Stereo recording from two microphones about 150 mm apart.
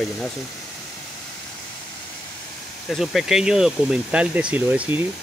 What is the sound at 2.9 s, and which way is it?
Speech, centre (ahead or behind).